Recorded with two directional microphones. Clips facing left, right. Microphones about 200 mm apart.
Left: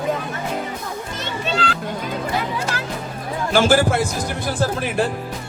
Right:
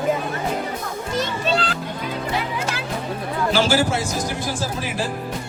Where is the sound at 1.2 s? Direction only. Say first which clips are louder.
Right 3 dB; 35° right (ahead or behind).